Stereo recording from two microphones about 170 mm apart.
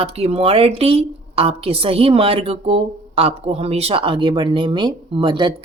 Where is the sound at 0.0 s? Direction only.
35° right (ahead or behind).